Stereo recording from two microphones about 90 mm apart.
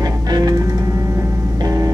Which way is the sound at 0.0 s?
45° right (ahead or behind).